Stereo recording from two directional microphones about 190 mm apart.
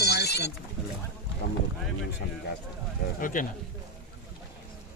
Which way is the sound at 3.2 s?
45° left (ahead or behind).